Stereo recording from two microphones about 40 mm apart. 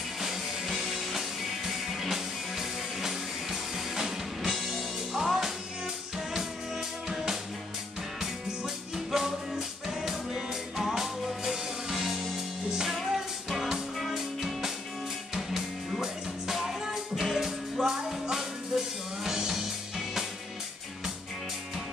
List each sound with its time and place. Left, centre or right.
0.2 s music: centre
8.2 s music: centre
16.0 s music: centre